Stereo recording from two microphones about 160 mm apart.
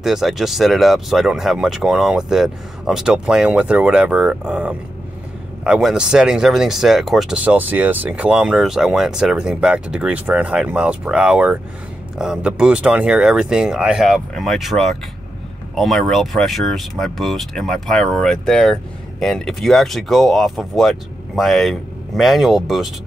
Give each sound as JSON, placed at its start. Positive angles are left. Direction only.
{"t": 0.0, "sound": "speech", "side_deg": 0}